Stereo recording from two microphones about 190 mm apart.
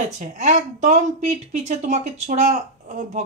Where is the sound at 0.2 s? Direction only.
40° right (ahead or behind).